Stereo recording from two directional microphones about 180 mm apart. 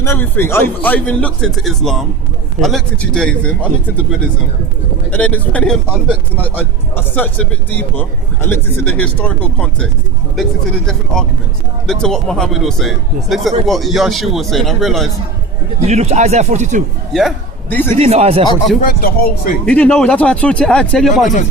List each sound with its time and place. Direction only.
0.0 s a man's voice: 15° left (ahead or behind)
5.1 s a man's voice: 10° left (ahead or behind)
10.8 s a man's voice: 5° left (ahead or behind)
15.8 s speech: 35° right (ahead or behind)
17.1 s a man's voice: centre (ahead or behind)
18.0 s speech: 35° right (ahead or behind)
18.8 s speech: 55° left (ahead or behind)
19.6 s a man's voice: 5° left (ahead or behind)